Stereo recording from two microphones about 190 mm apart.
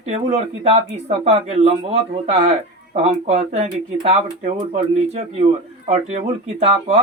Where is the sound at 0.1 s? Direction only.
35° right (ahead or behind).